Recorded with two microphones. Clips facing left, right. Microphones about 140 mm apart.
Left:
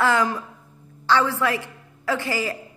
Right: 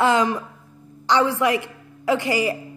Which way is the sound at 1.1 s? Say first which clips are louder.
Right 2 dB; 20° right (ahead or behind).